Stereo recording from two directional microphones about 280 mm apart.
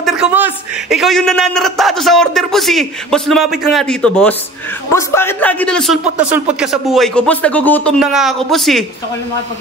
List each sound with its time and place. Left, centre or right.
0.0 s a man's voice: centre